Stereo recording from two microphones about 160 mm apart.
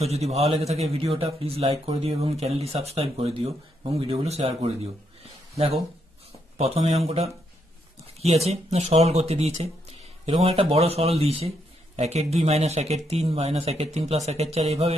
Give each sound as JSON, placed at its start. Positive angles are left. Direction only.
{"t": 0.0, "sound": "a man's voice", "side_deg": -40}
{"t": 5.2, "sound": "a sound", "side_deg": -40}
{"t": 6.6, "sound": "a man's voice", "side_deg": -40}